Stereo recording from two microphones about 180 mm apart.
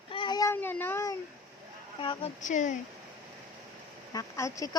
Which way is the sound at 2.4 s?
45° left (ahead or behind).